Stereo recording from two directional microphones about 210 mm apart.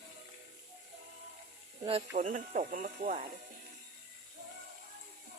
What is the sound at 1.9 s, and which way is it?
Speech, 30° right (ahead or behind).